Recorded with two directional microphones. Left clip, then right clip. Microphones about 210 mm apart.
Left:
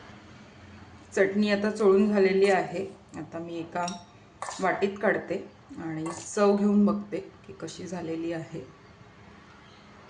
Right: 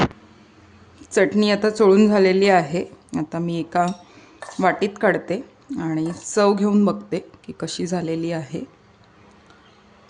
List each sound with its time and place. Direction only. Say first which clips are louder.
1.1 s speech: right 7 dB; 50° right (ahead or behind)